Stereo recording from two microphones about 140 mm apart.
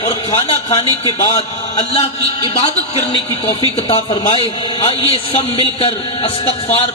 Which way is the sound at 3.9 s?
40° left (ahead or behind).